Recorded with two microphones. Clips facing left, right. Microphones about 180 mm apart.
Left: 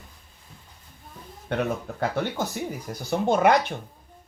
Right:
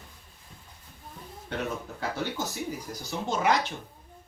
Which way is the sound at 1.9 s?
55° left (ahead or behind).